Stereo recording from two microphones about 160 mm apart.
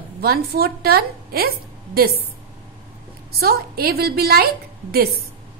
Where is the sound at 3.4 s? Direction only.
75° right (ahead or behind).